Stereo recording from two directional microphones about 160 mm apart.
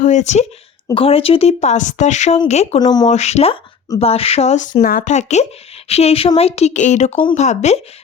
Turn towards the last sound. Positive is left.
turn(degrees=45)  # may be behind; listen again after turning